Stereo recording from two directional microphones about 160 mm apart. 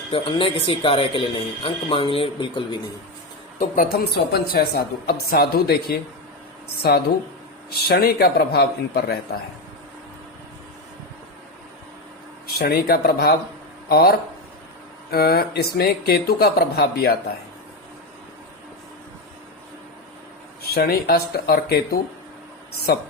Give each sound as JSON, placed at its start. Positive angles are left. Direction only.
{"t": 0.1, "sound": "speech", "side_deg": 35}
{"t": 3.6, "sound": "a woman's voice", "side_deg": 65}
{"t": 7.7, "sound": "a man's voice", "side_deg": 80}
{"t": 12.5, "sound": "a woman's voice", "side_deg": 75}
{"t": 20.6, "sound": "a woman's voice", "side_deg": 80}